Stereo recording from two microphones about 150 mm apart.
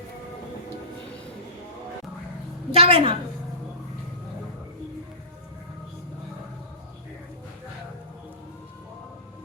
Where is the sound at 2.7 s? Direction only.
40° right (ahead or behind).